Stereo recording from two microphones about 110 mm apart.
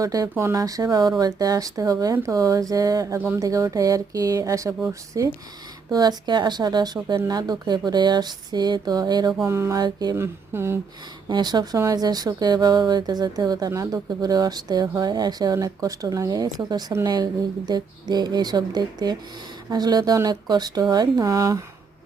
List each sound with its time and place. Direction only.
0.0 s speech: 30° right (ahead or behind)
3.2 s speech: 20° right (ahead or behind)
3.4 s speech: 30° right (ahead or behind)
9.5 s speech: 25° right (ahead or behind)
9.8 s speech: 40° right (ahead or behind)
10.2 s speech: 20° right (ahead or behind)
11.3 s speech: 40° right (ahead or behind)